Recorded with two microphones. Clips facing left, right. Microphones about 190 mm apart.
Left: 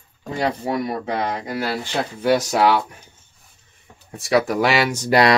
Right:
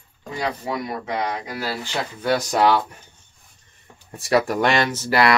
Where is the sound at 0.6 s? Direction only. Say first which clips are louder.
Left 4 dB; 30° left (ahead or behind).